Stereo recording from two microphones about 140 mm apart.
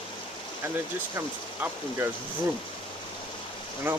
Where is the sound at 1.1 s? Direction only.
20° right (ahead or behind).